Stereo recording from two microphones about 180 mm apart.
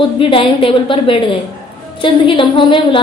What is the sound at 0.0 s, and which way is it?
A woman's voice, 30° left (ahead or behind).